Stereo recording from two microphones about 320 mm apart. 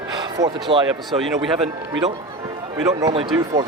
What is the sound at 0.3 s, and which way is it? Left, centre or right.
Speech, centre.